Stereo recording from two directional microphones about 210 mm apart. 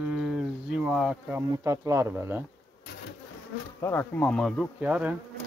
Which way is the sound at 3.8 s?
10° left (ahead or behind).